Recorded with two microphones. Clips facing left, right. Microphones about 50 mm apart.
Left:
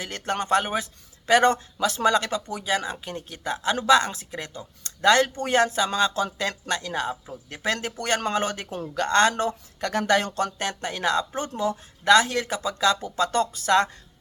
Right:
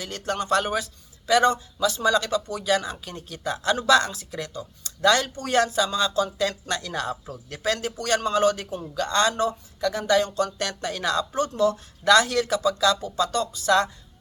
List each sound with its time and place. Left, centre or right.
0.0 s speech: left
1.3 s speech: left
2.6 s speech: left
7.6 s speech: left
10.6 s speech: left